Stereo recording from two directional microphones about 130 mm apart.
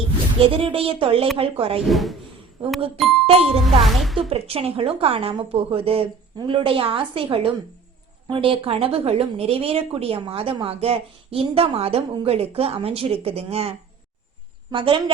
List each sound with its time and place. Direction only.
0.3 s a woman's voice: 45° right (ahead or behind)
1.9 s speech: centre (ahead or behind)
3.2 s a woman's voice: 50° right (ahead or behind)
3.8 s speech: centre (ahead or behind)
4.3 s a woman's voice: 50° right (ahead or behind)